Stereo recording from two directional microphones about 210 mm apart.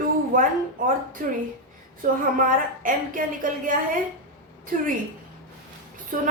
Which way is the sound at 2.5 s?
40° right (ahead or behind).